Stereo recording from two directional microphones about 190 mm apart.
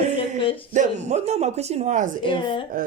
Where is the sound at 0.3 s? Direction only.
25° left (ahead or behind).